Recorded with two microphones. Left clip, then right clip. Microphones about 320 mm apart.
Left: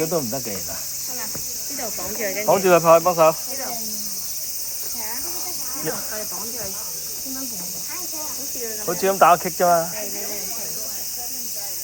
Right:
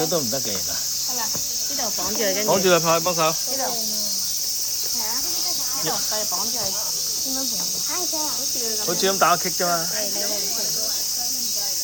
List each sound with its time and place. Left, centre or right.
2.5 s speech: centre
8.9 s speech: centre